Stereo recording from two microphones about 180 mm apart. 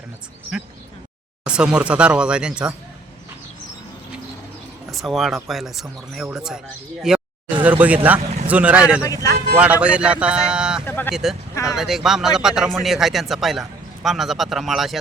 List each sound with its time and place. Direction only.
1.5 s speech: 5° right (ahead or behind)
4.9 s speech: centre (ahead or behind)
10.8 s speech: 10° left (ahead or behind)
11.1 s speech: centre (ahead or behind)
11.5 s speech: 15° left (ahead or behind)
11.8 s speech: centre (ahead or behind)